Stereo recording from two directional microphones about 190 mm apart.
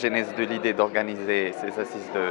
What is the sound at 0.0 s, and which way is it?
Speech, 10° left (ahead or behind).